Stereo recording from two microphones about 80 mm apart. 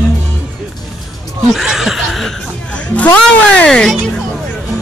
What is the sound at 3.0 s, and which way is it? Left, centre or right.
Speech, centre.